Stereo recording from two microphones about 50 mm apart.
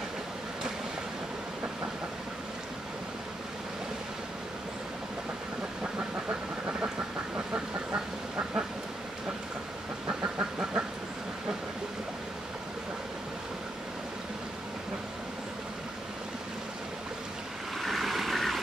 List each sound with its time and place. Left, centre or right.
7.3 s duck: right
17.7 s vehicle: centre